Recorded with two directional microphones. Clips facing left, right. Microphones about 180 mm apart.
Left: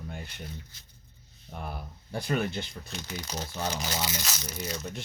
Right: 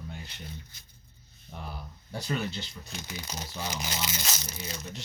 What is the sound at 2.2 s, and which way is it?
Speech, 55° left (ahead or behind).